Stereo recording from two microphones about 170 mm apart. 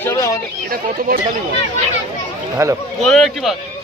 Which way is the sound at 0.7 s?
60° right (ahead or behind).